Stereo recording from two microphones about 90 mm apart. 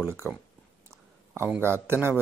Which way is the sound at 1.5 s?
30° right (ahead or behind).